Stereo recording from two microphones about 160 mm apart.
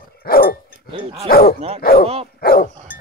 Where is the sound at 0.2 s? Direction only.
70° left (ahead or behind).